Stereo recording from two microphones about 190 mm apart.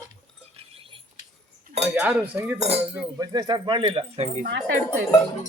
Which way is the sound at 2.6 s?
35° right (ahead or behind).